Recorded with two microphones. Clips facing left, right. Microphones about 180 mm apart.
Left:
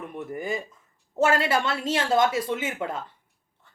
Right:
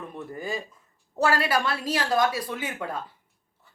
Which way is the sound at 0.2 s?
20° left (ahead or behind).